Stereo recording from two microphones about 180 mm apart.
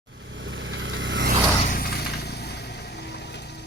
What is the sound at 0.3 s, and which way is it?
Vehicle, 90° right.